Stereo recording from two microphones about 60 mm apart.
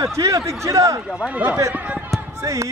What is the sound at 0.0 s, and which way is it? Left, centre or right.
A man's voice, right.